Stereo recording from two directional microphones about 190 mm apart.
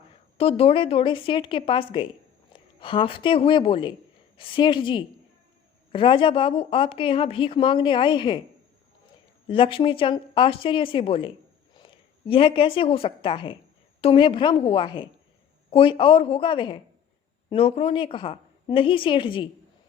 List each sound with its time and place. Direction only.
0.3 s a woman's voice: 30° left (ahead or behind)
9.5 s a woman's voice: 25° left (ahead or behind)